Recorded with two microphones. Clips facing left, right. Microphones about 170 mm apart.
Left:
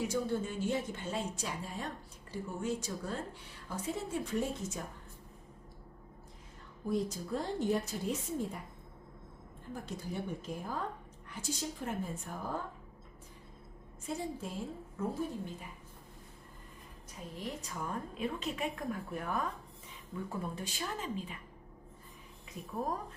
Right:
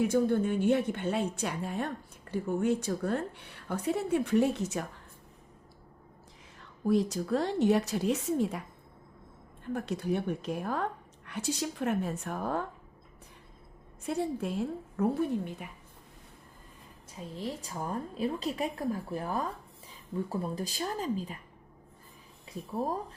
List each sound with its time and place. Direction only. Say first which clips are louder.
0.0 s a woman's voice: right 8 dB; 55° right (ahead or behind)
6.8 s a woman's voice: right 7 dB; 80° right
9.7 s a woman's voice: right 9 dB; 70° right (ahead or behind)
14.1 s a woman's voice: right 7 dB; 65° right (ahead or behind)
17.3 s a woman's voice: right 4 dB; 30° right (ahead or behind)